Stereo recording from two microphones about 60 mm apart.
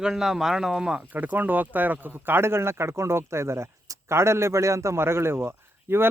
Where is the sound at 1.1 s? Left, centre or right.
Right.